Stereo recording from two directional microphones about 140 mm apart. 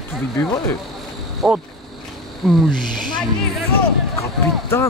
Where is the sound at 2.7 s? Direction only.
75° right (ahead or behind).